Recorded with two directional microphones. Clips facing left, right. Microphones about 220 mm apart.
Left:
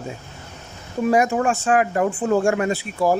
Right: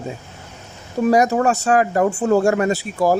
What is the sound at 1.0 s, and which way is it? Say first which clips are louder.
Speech: right 3 dB; 40° right (ahead or behind).